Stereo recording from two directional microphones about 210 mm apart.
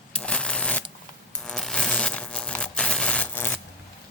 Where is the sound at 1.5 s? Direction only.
5° left (ahead or behind).